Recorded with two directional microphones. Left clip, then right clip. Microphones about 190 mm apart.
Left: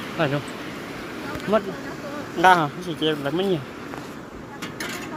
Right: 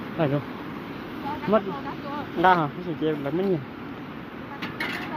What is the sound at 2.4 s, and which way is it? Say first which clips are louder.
Speech: left 4 dB; centre (ahead or behind).